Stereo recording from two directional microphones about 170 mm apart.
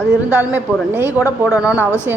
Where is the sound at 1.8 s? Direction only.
15° left (ahead or behind).